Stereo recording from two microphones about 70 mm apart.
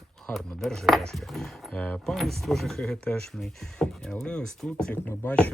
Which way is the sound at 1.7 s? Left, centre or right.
Centre.